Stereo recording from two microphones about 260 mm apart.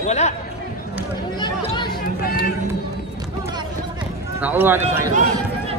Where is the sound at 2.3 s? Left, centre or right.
Left.